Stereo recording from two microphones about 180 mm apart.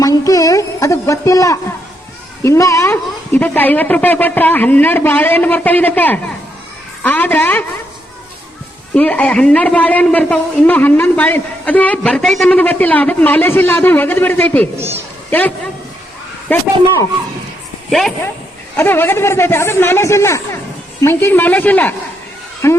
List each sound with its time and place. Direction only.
0.0 s a woman's voice: 20° left (ahead or behind)
9.0 s a woman's voice: 10° left (ahead or behind)
14.8 s a child's voice: 15° right (ahead or behind)
15.3 s a man's voice: 10° left (ahead or behind)
18.8 s a woman's voice: 10° left (ahead or behind)